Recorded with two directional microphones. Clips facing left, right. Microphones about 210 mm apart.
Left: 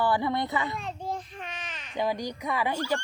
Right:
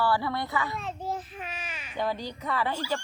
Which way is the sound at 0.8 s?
5° right (ahead or behind).